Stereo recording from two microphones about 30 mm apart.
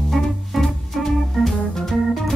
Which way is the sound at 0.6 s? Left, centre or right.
Centre.